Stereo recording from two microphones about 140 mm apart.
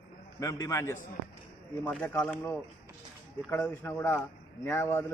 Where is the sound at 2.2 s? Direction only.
15° left (ahead or behind).